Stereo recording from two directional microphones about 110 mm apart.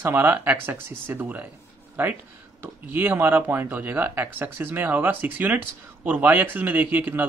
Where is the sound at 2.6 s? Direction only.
20° right (ahead or behind).